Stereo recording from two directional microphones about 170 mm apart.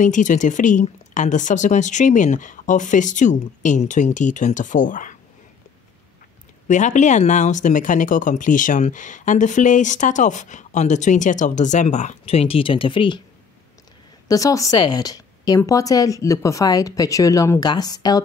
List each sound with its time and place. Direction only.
0.0 s speech: 50° left (ahead or behind)
6.7 s speech: 45° left (ahead or behind); by 13.2 s 30° left (ahead or behind)
14.2 s a woman's voice: 20° left (ahead or behind)